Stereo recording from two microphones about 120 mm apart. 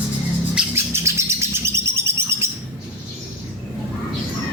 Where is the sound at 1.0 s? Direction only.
25° right (ahead or behind).